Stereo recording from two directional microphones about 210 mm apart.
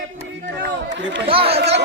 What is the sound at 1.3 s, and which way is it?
Speech, 25° right (ahead or behind).